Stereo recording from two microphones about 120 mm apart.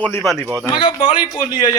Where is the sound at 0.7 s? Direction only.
45° left (ahead or behind).